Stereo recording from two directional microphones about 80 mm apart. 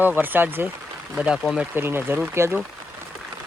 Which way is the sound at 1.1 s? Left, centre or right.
Centre.